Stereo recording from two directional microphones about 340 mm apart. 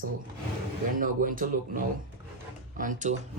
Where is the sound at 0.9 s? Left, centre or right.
Right.